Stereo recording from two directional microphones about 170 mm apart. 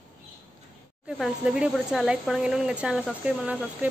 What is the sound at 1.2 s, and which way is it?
Speech, 5° right (ahead or behind).